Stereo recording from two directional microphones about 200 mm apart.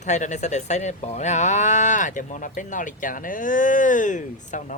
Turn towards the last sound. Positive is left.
turn(degrees=40)  # may be behind; listen again after turning